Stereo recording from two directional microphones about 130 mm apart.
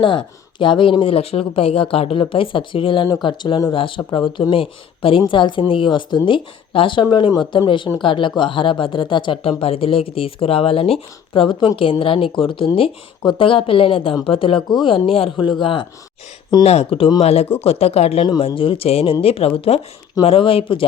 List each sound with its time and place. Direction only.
0.6 s speech: 40° left (ahead or behind)